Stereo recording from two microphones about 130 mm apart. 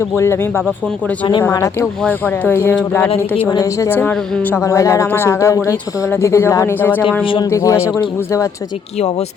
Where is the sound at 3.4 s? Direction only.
25° left (ahead or behind).